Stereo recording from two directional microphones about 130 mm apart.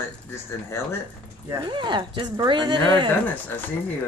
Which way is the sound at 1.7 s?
40° right (ahead or behind).